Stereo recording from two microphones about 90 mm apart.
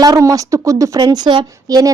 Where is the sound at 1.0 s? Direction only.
55° right (ahead or behind).